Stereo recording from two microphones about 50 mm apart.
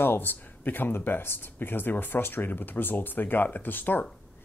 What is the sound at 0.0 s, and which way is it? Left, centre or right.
Speech, left.